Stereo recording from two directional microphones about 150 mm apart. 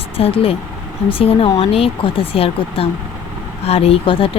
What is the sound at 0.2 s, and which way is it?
Speech, 40° left (ahead or behind).